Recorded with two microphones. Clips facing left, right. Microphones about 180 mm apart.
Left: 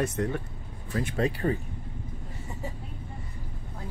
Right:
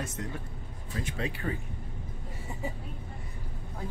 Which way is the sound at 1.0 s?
40° left (ahead or behind).